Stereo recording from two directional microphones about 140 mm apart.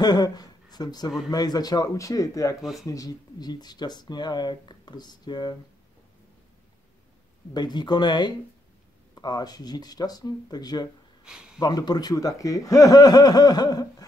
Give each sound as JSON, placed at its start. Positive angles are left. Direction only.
{"t": 0.0, "sound": "a man's voice", "side_deg": 30}
{"t": 2.6, "sound": "speech", "side_deg": 0}
{"t": 2.9, "sound": "speech", "side_deg": 25}
{"t": 7.5, "sound": "a man's voice", "side_deg": 30}
{"t": 11.2, "sound": "a sound", "side_deg": -5}
{"t": 11.6, "sound": "a man's voice", "side_deg": 30}